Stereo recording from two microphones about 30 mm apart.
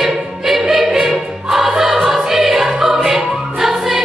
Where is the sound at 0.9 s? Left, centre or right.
Centre.